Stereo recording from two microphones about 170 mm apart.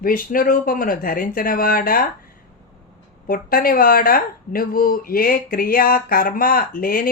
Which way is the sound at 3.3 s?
60° left (ahead or behind).